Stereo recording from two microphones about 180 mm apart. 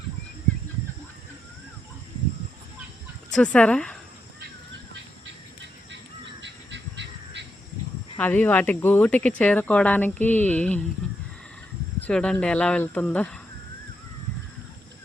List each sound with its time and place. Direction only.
3.3 s speech: 5° left (ahead or behind)
6.4 s a sound: 80° right
8.2 s speech: 10° left (ahead or behind)
11.9 s speech: 5° left (ahead or behind)